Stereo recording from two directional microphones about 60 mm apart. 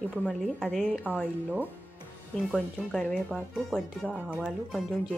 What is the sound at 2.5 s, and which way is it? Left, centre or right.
A woman's voice, centre.